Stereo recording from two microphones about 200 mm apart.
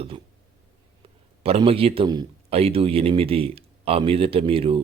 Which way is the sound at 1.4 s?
30° right (ahead or behind).